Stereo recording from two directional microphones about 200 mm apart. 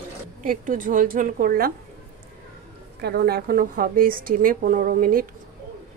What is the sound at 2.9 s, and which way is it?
A woman's voice, 55° right (ahead or behind).